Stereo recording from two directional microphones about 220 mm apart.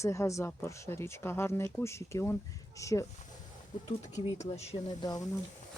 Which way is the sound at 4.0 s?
30° left (ahead or behind).